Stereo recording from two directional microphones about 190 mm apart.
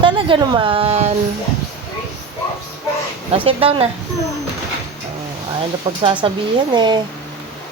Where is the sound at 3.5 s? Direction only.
30° right (ahead or behind).